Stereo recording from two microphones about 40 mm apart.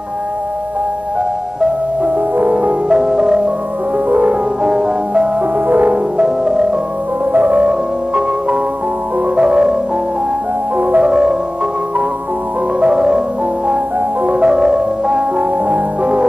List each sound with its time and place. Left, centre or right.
2.0 s music: right
2.9 s music: centre
4.1 s music: right
4.6 s music: right
5.7 s music: right
6.1 s music: centre
7.3 s music: right
9.3 s music: right
10.8 s music: right
11.1 s music: right
12.8 s music: right
14.3 s music: right